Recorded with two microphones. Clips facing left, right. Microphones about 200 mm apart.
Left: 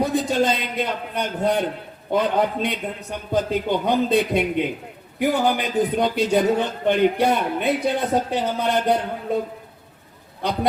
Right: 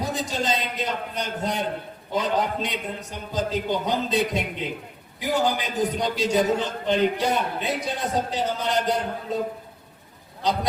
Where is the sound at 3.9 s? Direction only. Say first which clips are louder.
Left 7 dB; 60° left (ahead or behind).